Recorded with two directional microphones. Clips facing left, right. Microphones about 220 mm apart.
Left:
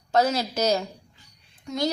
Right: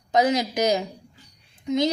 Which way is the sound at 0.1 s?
15° right (ahead or behind).